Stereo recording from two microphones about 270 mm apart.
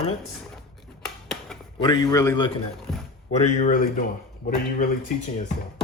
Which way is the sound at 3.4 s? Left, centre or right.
Left.